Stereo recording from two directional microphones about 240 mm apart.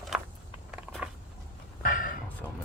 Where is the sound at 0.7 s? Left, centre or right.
Centre.